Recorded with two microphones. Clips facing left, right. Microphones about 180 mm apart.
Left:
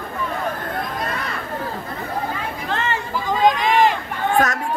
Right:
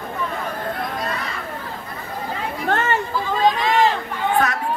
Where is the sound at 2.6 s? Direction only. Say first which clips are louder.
Right 4 dB; 50° right (ahead or behind).